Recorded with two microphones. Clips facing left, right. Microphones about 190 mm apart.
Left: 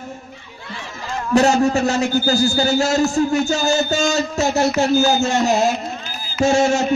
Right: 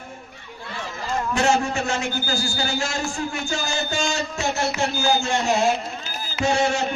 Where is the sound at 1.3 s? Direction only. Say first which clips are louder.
Left 8 dB; 40° left (ahead or behind).